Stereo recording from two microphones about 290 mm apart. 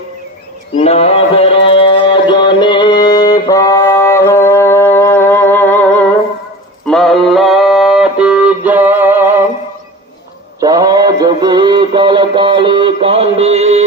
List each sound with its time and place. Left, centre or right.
0.8 s music: left; by 9.2 s centre
10.6 s synthetic singing: centre